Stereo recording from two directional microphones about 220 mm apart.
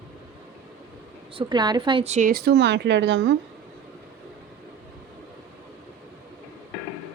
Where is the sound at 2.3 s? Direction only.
45° right (ahead or behind).